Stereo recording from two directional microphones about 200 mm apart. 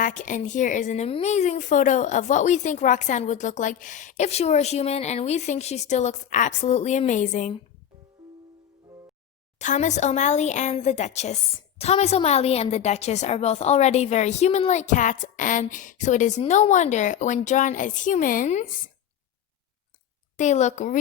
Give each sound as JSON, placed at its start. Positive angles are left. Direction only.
{"t": 0.0, "sound": "a woman's voice", "side_deg": 40}
{"t": 9.6, "sound": "a woman's voice", "side_deg": 35}
{"t": 20.3, "sound": "a woman's voice", "side_deg": 35}